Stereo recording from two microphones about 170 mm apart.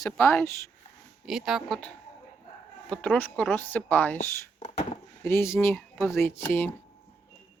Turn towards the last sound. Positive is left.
turn(degrees=10)  # may be behind; listen again after turning